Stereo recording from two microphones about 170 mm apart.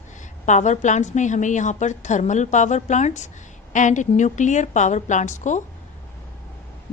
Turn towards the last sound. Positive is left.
turn(degrees=45)  # may be behind; listen again after turning